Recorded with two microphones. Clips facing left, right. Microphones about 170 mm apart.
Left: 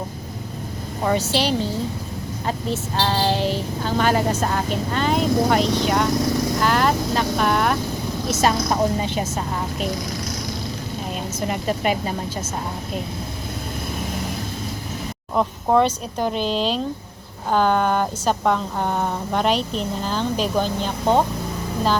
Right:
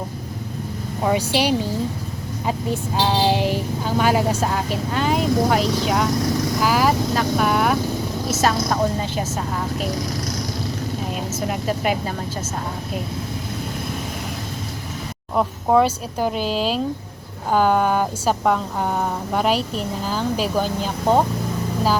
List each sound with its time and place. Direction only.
1.0 s speech: 10° right (ahead or behind)
8.4 s a woman's voice: 15° left (ahead or behind)
11.3 s speech: centre (ahead or behind)
15.4 s speech: 5° right (ahead or behind)